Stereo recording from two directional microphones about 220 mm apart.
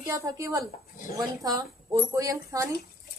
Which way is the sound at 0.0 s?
15° right (ahead or behind).